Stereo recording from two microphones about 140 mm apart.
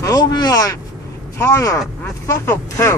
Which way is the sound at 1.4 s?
20° left (ahead or behind).